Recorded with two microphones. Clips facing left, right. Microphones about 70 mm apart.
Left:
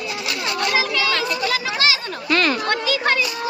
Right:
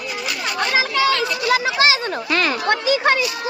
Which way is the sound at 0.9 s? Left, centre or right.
Right.